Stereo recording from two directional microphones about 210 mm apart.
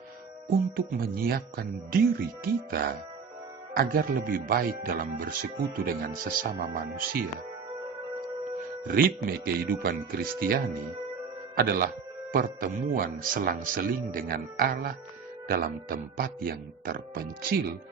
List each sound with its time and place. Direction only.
0.8 s speech: 45° right (ahead or behind)
8.9 s speech: 45° right (ahead or behind)